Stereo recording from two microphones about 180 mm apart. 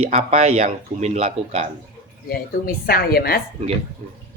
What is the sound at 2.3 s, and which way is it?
Speech, 55° left (ahead or behind).